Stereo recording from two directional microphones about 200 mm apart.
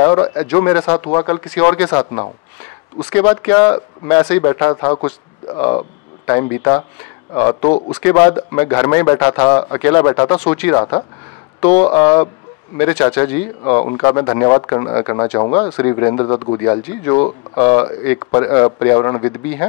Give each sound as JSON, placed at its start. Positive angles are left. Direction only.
{"t": 0.0, "sound": "a man's voice", "side_deg": 20}
{"t": 2.0, "sound": "speech", "side_deg": 25}
{"t": 3.1, "sound": "a man's voice", "side_deg": 10}
{"t": 5.6, "sound": "speech", "side_deg": 25}
{"t": 6.2, "sound": "a man's voice", "side_deg": 15}
{"t": 15.7, "sound": "a man's voice", "side_deg": 10}
{"t": 16.1, "sound": "a man's voice", "side_deg": 25}